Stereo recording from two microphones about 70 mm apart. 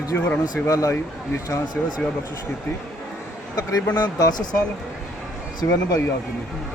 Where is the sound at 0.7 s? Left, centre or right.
Left.